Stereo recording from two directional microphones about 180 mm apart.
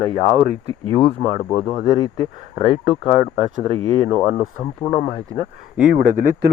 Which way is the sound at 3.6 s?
35° right (ahead or behind).